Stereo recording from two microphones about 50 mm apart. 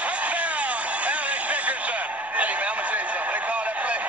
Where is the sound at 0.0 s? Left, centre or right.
Right.